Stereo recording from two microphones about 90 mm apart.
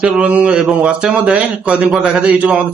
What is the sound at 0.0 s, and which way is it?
A man's voice, 15° right (ahead or behind).